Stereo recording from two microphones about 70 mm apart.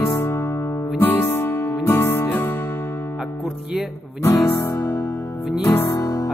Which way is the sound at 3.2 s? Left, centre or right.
Centre.